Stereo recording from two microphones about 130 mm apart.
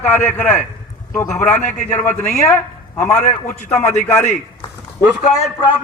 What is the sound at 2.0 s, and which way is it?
A man's voice, 15° left (ahead or behind).